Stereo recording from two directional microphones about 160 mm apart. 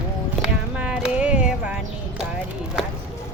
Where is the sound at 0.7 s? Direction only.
5° right (ahead or behind).